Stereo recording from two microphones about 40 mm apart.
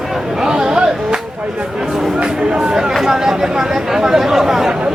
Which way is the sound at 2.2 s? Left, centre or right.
Right.